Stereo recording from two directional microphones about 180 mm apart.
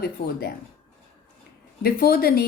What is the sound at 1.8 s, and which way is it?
Speech, 60° left (ahead or behind).